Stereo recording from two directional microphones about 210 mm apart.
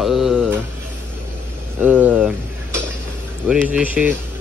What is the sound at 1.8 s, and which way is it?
Speech, 5° right (ahead or behind).